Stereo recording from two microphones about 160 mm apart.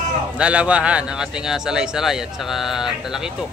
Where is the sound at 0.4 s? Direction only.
5° right (ahead or behind).